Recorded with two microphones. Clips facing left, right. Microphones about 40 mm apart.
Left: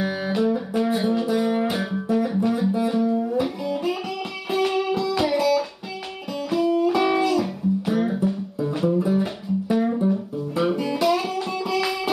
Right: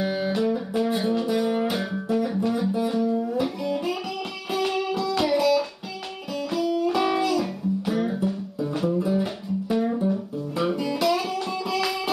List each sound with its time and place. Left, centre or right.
0.0 s music: centre
6.5 s music: left
6.8 s music: centre